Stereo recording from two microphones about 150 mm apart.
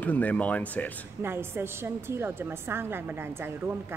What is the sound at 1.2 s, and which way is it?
A woman's voice, 15° right (ahead or behind).